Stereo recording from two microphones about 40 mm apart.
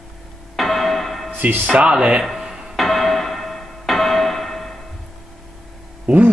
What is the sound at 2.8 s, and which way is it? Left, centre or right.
Music, centre.